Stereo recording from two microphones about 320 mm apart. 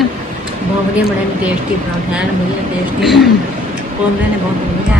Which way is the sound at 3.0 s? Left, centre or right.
Centre.